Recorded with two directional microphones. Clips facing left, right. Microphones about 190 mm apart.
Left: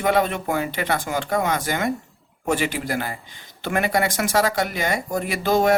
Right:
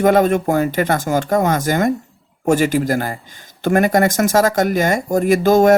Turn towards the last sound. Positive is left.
turn(degrees=-45)  # may be behind; listen again after turning